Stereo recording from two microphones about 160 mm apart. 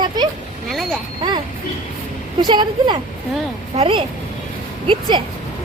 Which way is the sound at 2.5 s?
30° right (ahead or behind).